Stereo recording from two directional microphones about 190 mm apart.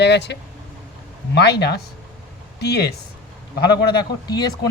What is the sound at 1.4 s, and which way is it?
Speech, 60° left (ahead or behind).